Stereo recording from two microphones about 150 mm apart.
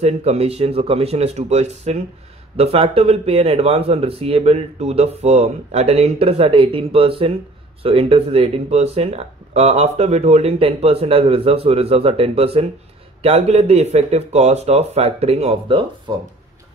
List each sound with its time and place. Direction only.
0.0 s speech: 45° right (ahead or behind)